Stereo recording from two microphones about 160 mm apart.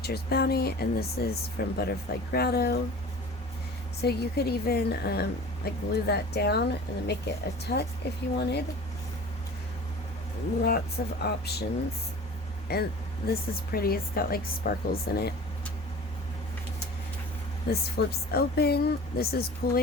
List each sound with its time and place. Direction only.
0.0 s a woman's voice: 80° left
4.0 s a woman's voice: 85° left
10.6 s speech: 80° left
12.7 s a woman's voice: 80° left
17.7 s a woman's voice: 80° left